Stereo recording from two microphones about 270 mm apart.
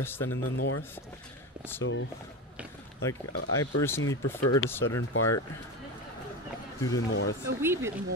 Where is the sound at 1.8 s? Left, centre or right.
Left.